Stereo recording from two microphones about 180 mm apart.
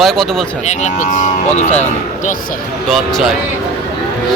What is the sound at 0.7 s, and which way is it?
Speech, 45° left (ahead or behind).